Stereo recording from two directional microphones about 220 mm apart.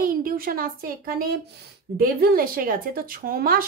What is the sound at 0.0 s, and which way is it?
Speech, 40° right (ahead or behind).